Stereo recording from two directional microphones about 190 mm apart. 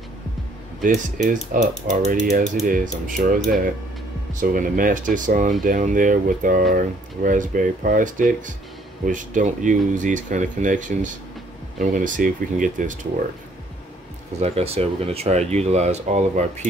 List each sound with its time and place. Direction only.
0.8 s speech: 45° right (ahead or behind)
4.4 s speech: 45° right (ahead or behind)
14.4 s speech: 30° right (ahead or behind)